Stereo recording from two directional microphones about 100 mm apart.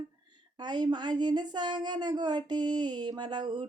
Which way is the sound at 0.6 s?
45° right (ahead or behind).